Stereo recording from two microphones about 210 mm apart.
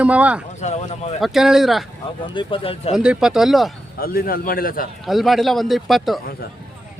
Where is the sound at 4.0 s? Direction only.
45° left (ahead or behind).